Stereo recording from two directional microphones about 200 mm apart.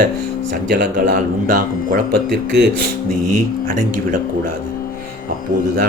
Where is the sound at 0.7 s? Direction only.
45° right (ahead or behind).